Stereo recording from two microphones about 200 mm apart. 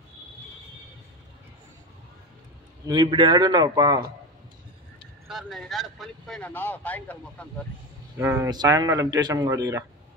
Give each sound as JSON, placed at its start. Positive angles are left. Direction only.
{"t": 2.9, "sound": "speech", "side_deg": -25}
{"t": 5.3, "sound": "speech", "side_deg": 0}
{"t": 8.2, "sound": "speech", "side_deg": -10}